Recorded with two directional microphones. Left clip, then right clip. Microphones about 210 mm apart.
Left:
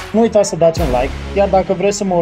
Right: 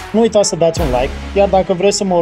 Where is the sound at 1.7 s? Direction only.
30° right (ahead or behind).